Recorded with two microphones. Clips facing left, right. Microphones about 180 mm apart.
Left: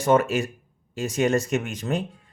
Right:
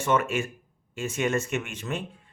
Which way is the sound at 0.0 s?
35° left (ahead or behind).